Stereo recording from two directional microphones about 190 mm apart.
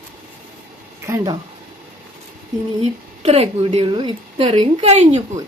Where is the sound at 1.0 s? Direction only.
20° right (ahead or behind).